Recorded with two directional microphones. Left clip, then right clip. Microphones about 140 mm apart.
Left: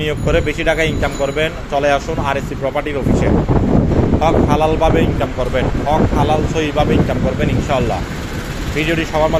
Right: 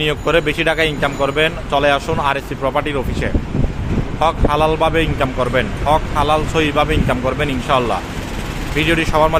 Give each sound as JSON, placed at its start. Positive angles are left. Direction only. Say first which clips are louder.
{"t": 0.0, "sound": "speech", "louder": "right 1 dB", "side_deg": -30}